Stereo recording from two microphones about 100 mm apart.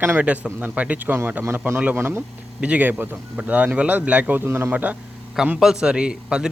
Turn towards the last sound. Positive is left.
turn(degrees=-10)  # may be behind; listen again after turning